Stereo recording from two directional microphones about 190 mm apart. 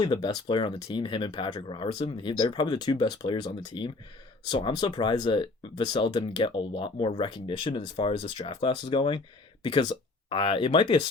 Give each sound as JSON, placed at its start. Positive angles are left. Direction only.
{"t": 0.0, "sound": "speech", "side_deg": 25}